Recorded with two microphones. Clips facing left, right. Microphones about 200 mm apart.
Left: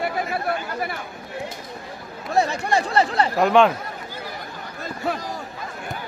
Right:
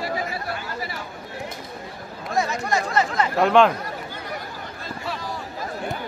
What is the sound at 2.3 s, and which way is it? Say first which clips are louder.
Speech: left 3 dB; 30° left (ahead or behind).